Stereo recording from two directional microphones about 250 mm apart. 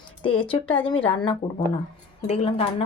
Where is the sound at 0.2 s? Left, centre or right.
Left.